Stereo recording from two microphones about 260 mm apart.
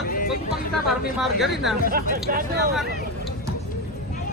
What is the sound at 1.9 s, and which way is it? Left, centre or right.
Speech, right.